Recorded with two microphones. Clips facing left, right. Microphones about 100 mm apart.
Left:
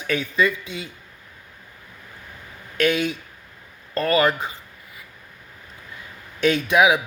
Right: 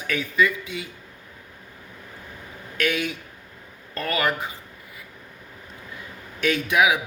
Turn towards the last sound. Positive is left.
turn(degrees=25)  # may be behind; listen again after turning